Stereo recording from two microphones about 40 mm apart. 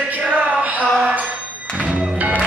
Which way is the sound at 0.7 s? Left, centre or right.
Right.